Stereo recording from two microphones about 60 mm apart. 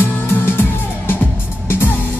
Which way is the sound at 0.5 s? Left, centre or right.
Left.